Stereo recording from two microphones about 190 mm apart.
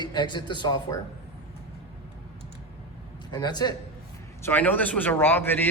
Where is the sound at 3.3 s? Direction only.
20° left (ahead or behind).